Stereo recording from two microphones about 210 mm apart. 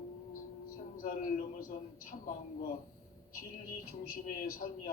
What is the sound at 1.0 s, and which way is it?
A man's voice, 40° left (ahead or behind).